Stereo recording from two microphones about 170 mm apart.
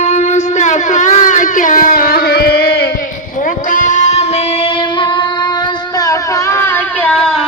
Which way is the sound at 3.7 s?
50° left (ahead or behind).